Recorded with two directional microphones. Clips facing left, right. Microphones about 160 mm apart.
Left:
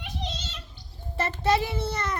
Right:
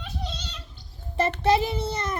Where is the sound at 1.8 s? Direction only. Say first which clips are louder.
Right 1 dB; 20° right (ahead or behind).